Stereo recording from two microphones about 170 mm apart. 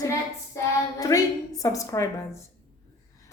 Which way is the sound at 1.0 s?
20° left (ahead or behind).